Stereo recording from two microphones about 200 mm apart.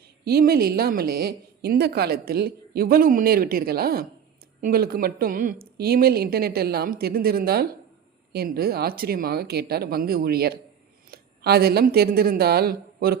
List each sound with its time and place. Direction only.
0.3 s a woman's voice: 50° right (ahead or behind)